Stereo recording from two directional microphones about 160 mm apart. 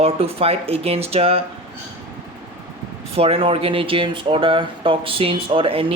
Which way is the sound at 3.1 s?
35° right (ahead or behind).